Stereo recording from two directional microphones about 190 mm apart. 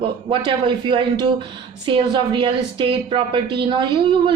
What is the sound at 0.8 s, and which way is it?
A man's voice, 25° right (ahead or behind).